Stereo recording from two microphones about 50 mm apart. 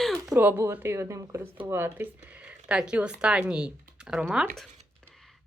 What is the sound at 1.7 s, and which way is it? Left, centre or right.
Speech, right.